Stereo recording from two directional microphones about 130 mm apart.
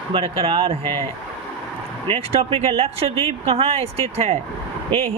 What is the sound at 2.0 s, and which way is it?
Speech, 45° right (ahead or behind).